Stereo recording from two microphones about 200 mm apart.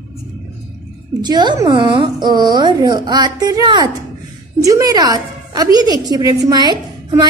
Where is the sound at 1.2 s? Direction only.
20° right (ahead or behind).